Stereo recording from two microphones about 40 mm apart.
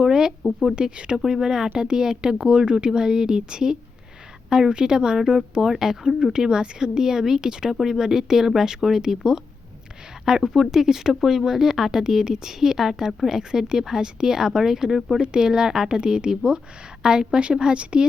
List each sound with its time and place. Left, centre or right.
0.0 s a sound: centre
0.8 s a woman's voice: right
1.2 s speech: centre
10.2 s a woman's voice: centre